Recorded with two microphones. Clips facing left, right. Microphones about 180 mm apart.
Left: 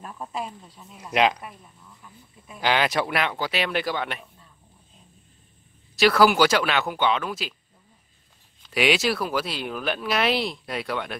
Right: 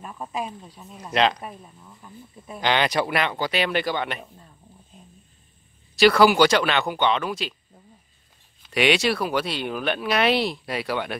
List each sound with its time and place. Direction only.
0.0 s speech: 5° right (ahead or behind)
0.3 s snake: 15° right (ahead or behind)
1.1 s speech: 10° left (ahead or behind)
1.4 s speech: 25° right (ahead or behind)
2.6 s speech: 5° left (ahead or behind)
5.9 s speech: centre (ahead or behind)
8.7 s speech: centre (ahead or behind)